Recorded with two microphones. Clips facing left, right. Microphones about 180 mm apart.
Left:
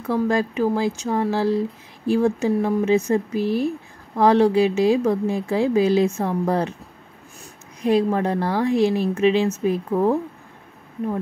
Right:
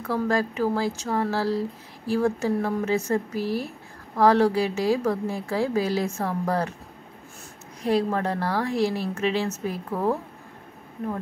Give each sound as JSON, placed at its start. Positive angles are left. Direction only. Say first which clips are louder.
{"t": 0.1, "sound": "a woman's voice", "louder": "left 4 dB", "side_deg": 20}
{"t": 7.8, "sound": "a woman's voice", "louder": "left 4 dB", "side_deg": 15}